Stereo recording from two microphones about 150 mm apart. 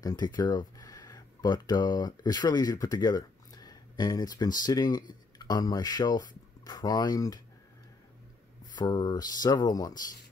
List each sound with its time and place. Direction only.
0.0 s speech: 25° left (ahead or behind)
8.7 s speech: 30° left (ahead or behind)